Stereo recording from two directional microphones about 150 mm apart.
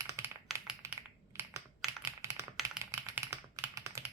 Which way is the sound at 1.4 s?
20° right (ahead or behind).